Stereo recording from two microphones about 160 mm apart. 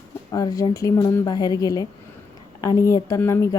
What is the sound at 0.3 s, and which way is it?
A woman's voice, 25° left (ahead or behind).